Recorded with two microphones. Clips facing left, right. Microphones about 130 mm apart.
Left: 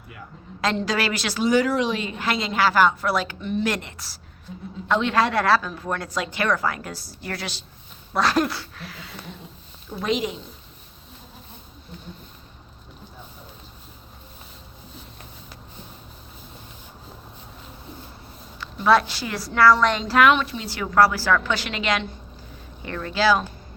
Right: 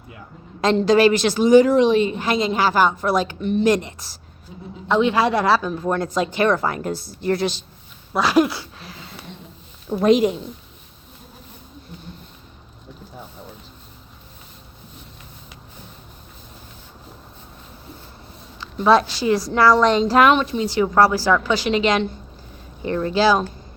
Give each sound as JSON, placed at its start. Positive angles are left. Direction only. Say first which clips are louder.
{"t": 0.6, "sound": "a woman's voice", "louder": "right 9 dB", "side_deg": -20}
{"t": 8.1, "sound": "a sound", "louder": "right 4 dB", "side_deg": -5}
{"t": 9.9, "sound": "speech", "louder": "right 10 dB", "side_deg": -50}
{"t": 18.6, "sound": "a woman's voice", "louder": "right 3 dB", "side_deg": -20}
{"t": 20.6, "sound": "a woman's voice", "louder": "right 3 dB", "side_deg": -20}